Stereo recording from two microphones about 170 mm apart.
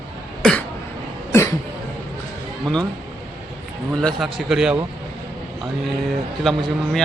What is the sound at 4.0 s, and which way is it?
Speech, centre (ahead or behind).